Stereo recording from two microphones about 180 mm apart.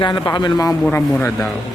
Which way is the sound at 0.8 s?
10° left (ahead or behind).